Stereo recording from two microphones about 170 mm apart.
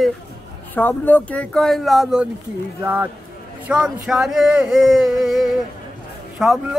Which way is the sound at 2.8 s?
15° right (ahead or behind).